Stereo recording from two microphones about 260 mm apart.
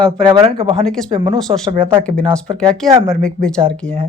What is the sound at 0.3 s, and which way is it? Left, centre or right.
Speech, centre.